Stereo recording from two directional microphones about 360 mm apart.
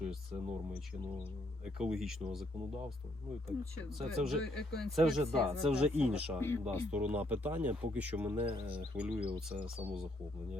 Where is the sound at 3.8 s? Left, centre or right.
Centre.